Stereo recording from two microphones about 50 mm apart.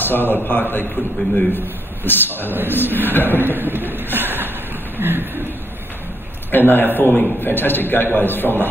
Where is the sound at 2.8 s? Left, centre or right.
Right.